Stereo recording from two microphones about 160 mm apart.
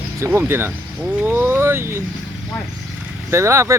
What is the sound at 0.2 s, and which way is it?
Speech, 15° right (ahead or behind).